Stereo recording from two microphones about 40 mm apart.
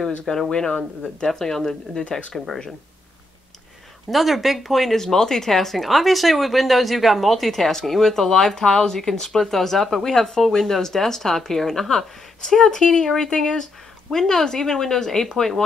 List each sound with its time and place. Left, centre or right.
0.2 s a woman's voice: centre
0.5 s a woman's voice: centre
2.0 s speech: left
2.3 s speech: centre
4.1 s speech: centre
5.0 s a woman's voice: centre